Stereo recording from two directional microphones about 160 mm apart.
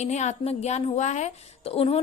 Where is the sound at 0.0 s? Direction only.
45° left (ahead or behind).